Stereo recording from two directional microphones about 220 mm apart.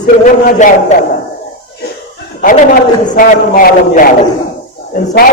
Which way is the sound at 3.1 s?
35° left (ahead or behind).